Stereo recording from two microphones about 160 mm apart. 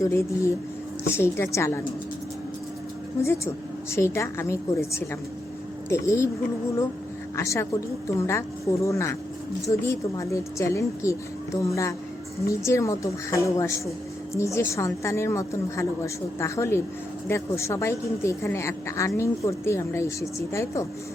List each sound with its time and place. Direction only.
0.0 s a woman's voice: 20° left (ahead or behind)
3.2 s speech: 15° left (ahead or behind)
7.3 s a woman's voice: 15° left (ahead or behind)